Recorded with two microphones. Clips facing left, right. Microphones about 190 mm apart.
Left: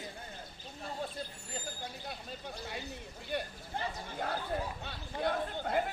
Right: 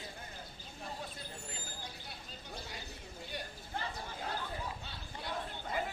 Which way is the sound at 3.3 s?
60° left (ahead or behind).